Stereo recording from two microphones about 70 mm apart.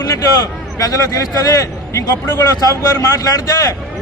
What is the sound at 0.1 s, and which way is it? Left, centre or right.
A man's voice, left.